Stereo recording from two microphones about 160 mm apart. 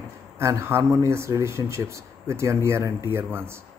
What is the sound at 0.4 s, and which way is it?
Speech, 15° right (ahead or behind).